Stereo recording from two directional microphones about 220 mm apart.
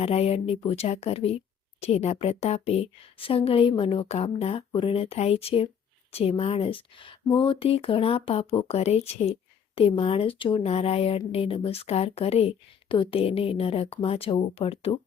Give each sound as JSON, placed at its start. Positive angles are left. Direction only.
{"t": 0.0, "sound": "speech", "side_deg": 30}